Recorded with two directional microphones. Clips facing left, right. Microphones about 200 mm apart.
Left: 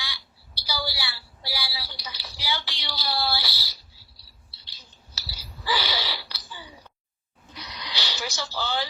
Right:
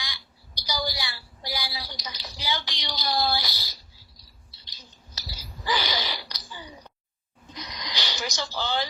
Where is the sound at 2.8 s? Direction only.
20° right (ahead or behind).